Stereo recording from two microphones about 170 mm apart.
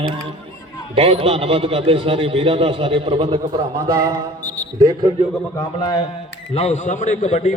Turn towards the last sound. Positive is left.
turn(degrees=45)  # may be behind; listen again after turning